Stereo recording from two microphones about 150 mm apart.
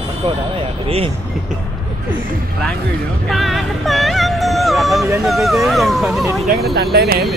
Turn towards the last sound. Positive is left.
turn(degrees=-90)